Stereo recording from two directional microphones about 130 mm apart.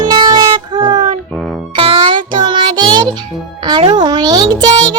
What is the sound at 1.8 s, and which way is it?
Child singing, 40° right (ahead or behind).